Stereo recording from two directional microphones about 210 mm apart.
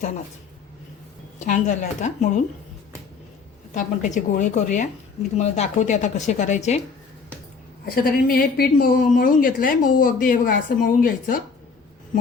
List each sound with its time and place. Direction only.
1.5 s speech: 35° left (ahead or behind)
3.8 s speech: 35° left (ahead or behind)
8.0 s speech: 45° left (ahead or behind)